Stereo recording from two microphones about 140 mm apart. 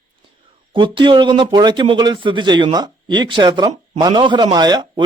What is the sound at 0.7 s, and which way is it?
A man's voice, 35° right (ahead or behind).